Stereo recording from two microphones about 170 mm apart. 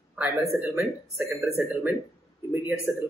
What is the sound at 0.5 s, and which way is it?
Speech, 15° right (ahead or behind).